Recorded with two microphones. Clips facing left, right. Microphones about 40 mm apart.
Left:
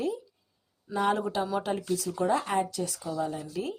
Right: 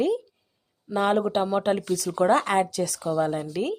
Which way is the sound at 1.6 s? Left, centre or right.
Right.